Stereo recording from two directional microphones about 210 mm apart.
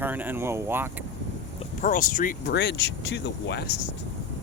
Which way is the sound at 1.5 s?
40° left (ahead or behind).